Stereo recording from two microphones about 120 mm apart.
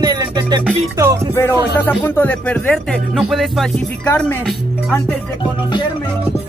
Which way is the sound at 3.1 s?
5° right (ahead or behind).